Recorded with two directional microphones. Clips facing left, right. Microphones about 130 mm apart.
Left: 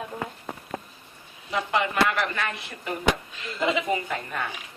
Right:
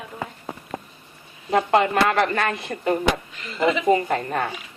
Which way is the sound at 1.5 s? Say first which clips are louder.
Right 7 dB; 45° right (ahead or behind).